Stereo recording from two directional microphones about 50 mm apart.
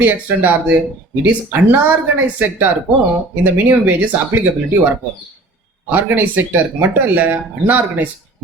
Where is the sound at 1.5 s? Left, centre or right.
Right.